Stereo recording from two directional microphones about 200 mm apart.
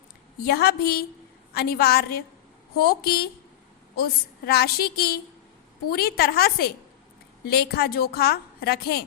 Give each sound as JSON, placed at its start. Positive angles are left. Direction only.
{"t": 0.4, "sound": "a woman's voice", "side_deg": 50}